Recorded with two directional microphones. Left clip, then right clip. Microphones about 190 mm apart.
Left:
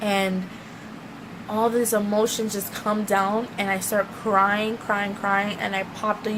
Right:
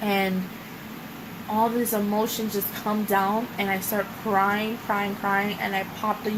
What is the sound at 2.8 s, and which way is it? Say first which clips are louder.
A woman's voice: left 2 dB; 35° left (ahead or behind).